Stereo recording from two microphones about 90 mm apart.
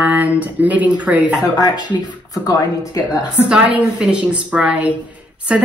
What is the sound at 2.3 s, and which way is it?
Speech, 40° left (ahead or behind).